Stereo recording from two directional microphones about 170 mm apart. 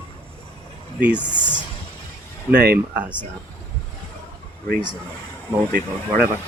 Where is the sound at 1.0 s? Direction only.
5° right (ahead or behind).